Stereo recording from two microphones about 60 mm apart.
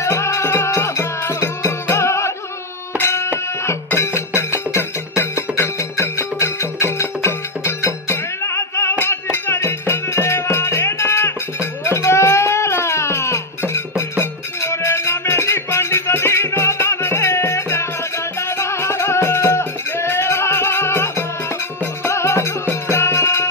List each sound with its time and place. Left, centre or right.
0.0 s music: left
3.0 s a sound: left
3.6 s music: left